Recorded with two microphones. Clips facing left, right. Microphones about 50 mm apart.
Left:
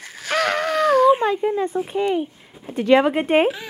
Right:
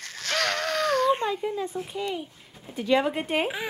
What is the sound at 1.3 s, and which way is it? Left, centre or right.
Speech, left.